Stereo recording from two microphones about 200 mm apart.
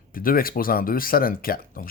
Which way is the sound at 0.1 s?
45° left (ahead or behind).